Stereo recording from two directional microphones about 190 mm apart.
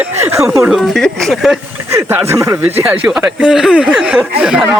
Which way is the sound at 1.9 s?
15° right (ahead or behind).